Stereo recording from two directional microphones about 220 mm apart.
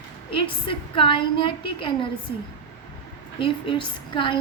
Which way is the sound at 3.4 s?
25° left (ahead or behind).